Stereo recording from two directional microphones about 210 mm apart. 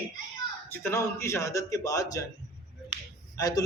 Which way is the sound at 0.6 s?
10° left (ahead or behind).